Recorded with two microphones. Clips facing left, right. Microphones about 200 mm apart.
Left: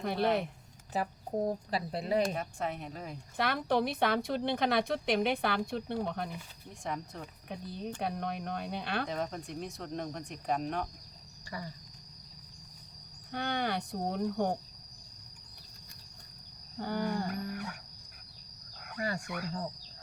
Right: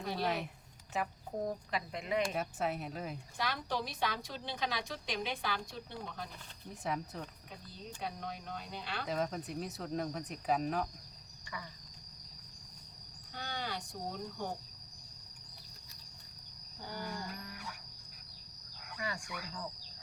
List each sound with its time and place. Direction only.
0.0 s a woman's voice: 60° left (ahead or behind)
0.9 s speech: 35° left (ahead or behind)
2.3 s speech: 5° right (ahead or behind)
3.3 s a woman's voice: 60° left (ahead or behind)
6.8 s speech: 5° right (ahead or behind)
7.5 s a woman's voice: 60° left (ahead or behind)
9.0 s speech: centre (ahead or behind)
11.5 s speech: 40° left (ahead or behind)
13.3 s a woman's voice: 60° left (ahead or behind)
16.7 s a woman's voice: 65° left (ahead or behind)
17.4 s music: 55° left (ahead or behind)
18.9 s speech: 40° left (ahead or behind)
19.2 s speech: 50° left (ahead or behind)